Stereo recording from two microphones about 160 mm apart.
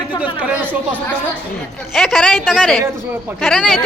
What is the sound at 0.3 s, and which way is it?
Speech, 10° right (ahead or behind).